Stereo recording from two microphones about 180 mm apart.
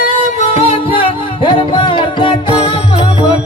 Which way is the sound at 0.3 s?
35° left (ahead or behind).